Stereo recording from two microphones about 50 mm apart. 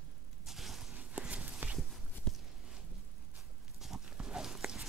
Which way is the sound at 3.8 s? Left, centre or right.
Centre.